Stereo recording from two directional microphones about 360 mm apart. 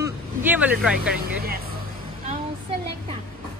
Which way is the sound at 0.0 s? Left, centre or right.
Centre.